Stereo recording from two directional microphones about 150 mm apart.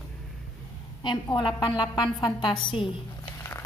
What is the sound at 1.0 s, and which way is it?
A woman's voice, 30° left (ahead or behind).